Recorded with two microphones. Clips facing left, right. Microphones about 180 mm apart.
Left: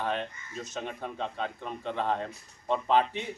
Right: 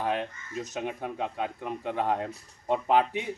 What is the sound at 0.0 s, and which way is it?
Speech, 5° right (ahead or behind).